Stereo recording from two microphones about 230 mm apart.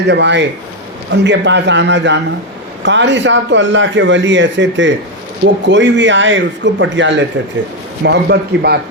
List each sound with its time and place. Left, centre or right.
0.1 s a man's voice: right